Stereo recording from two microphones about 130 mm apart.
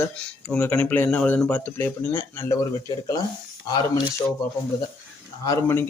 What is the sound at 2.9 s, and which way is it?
Speech, 30° left (ahead or behind).